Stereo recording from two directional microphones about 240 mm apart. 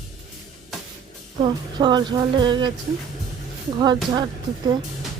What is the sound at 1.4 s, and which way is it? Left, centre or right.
Speech, centre.